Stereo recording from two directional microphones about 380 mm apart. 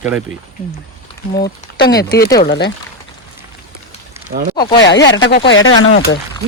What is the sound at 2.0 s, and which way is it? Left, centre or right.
Speech, left.